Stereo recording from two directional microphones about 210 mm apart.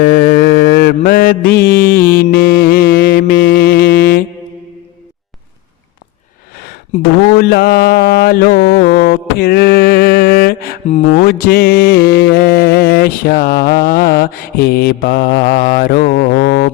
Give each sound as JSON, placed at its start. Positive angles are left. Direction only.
{"t": 0.0, "sound": "mantra", "side_deg": 45}
{"t": 1.6, "sound": "music", "side_deg": 45}
{"t": 2.2, "sound": "mantra", "side_deg": 45}
{"t": 7.3, "sound": "music", "side_deg": 50}